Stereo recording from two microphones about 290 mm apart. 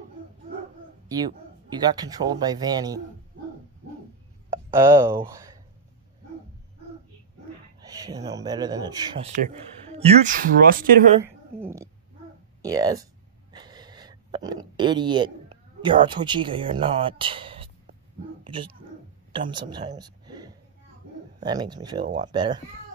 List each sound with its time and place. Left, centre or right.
1.0 s speech: centre
4.7 s speech: centre
7.8 s speech: centre
9.9 s speech: right
11.2 s a sound: centre
15.8 s speech: centre
18.4 s dog: centre
19.4 s a woman's voice: centre